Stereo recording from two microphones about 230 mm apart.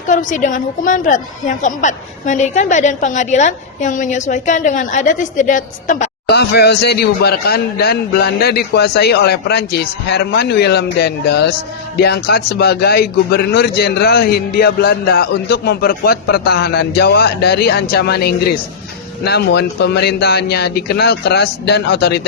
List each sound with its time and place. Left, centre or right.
0.1 s a woman's voice: left
6.2 s a man's voice: left